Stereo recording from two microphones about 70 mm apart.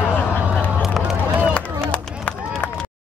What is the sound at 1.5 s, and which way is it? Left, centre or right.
Run, centre.